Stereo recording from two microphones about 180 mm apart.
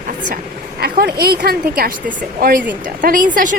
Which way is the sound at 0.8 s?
60° right (ahead or behind).